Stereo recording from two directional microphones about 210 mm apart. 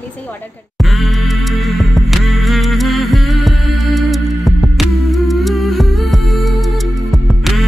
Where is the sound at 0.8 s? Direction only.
Centre (ahead or behind).